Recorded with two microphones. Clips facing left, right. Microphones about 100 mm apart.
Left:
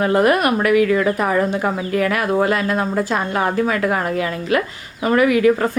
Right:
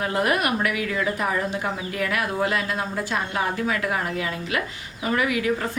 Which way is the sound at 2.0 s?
50° left (ahead or behind).